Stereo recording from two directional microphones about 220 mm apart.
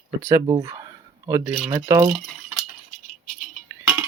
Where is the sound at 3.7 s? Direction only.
5° right (ahead or behind).